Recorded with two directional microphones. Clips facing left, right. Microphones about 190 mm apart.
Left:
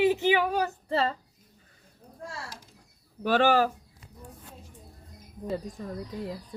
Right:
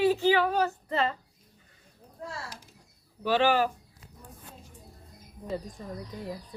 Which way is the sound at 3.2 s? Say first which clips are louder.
Left 2 dB; 45° left (ahead or behind).